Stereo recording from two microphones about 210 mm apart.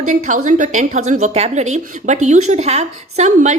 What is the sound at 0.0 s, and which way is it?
A woman's voice, 40° right (ahead or behind).